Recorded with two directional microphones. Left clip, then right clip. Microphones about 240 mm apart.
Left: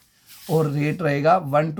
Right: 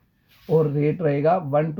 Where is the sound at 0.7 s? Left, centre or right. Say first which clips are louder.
Right 1 dB; centre.